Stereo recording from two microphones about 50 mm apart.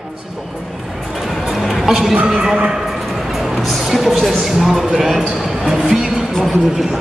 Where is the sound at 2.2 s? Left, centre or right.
Centre.